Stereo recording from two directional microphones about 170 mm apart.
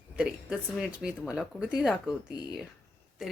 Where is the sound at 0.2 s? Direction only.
5° right (ahead or behind).